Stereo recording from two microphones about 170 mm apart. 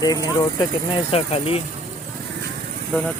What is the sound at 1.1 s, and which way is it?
Speech, 35° left (ahead or behind).